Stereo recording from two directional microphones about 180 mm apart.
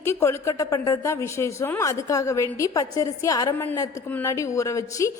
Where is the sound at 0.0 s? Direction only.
15° left (ahead or behind).